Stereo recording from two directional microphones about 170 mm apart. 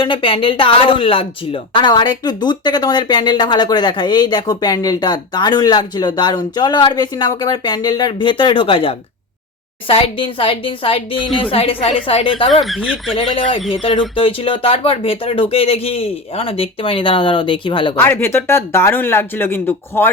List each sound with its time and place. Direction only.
0.0 s speech: 30° left (ahead or behind)
12.6 s speech: centre (ahead or behind)
13.1 s speech: 30° left (ahead or behind)
17.9 s speech: 15° left (ahead or behind)